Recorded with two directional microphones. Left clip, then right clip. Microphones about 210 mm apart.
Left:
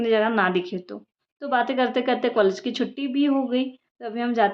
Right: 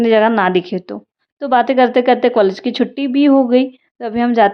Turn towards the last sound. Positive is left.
turn(degrees=-35)  # may be behind; listen again after turning